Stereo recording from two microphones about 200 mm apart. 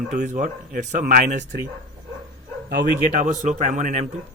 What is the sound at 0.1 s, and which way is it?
Speech, 40° right (ahead or behind).